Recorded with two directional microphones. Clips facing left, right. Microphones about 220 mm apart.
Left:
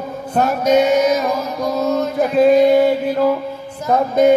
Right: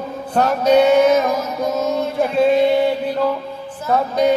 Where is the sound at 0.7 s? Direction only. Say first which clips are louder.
Right 2 dB; 40° left (ahead or behind).